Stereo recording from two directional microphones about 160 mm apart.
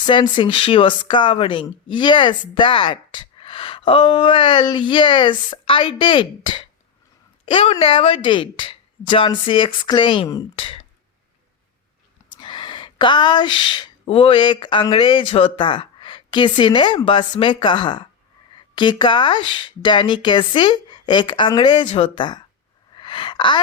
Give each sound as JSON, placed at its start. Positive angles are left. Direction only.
{"t": 0.0, "sound": "a woman's voice", "side_deg": 30}
{"t": 12.3, "sound": "speech", "side_deg": 30}
{"t": 23.0, "sound": "gasp", "side_deg": 30}